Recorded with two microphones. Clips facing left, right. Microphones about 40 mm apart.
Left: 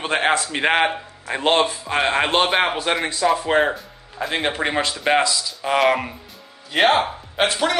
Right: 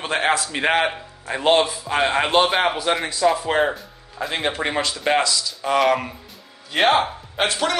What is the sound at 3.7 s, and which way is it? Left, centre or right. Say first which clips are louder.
A man's voice: left 2 dB; centre.